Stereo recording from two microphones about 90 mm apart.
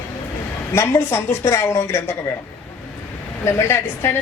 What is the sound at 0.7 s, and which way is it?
A woman's voice, 30° left (ahead or behind).